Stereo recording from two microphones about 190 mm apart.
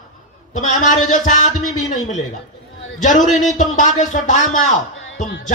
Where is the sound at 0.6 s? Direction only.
40° left (ahead or behind).